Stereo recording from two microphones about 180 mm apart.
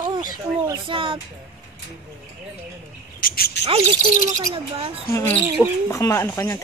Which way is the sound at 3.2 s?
55° left (ahead or behind).